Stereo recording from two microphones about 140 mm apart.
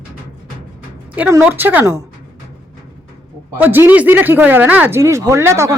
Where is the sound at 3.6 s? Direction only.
15° right (ahead or behind).